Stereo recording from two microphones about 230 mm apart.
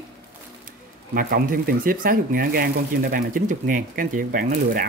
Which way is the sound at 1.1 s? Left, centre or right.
Right.